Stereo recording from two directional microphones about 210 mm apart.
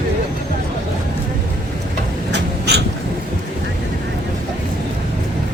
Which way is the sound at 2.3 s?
50° right (ahead or behind).